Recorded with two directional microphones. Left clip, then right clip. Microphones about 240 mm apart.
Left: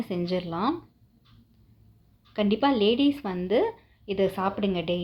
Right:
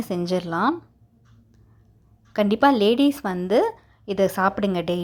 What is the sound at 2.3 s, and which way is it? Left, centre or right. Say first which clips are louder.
A woman's voice: right 6 dB; right.